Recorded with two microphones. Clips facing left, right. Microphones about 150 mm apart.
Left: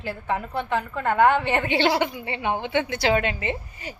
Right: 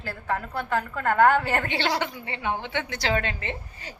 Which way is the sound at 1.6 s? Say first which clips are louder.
Left 5 dB; 15° left (ahead or behind).